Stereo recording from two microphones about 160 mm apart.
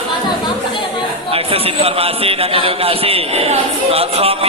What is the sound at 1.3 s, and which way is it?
A man's voice, 35° right (ahead or behind).